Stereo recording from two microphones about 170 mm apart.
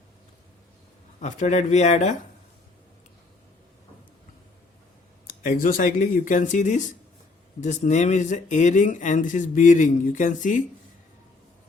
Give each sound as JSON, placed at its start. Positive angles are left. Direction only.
{"t": 1.2, "sound": "speech", "side_deg": 45}
{"t": 5.4, "sound": "speech", "side_deg": 55}